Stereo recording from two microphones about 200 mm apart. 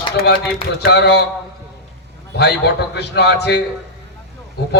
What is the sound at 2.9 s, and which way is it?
Speech, 55° left (ahead or behind).